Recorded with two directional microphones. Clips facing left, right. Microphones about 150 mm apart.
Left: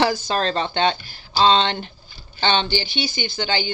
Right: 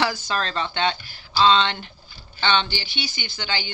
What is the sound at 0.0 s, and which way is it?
Speech, 30° left (ahead or behind).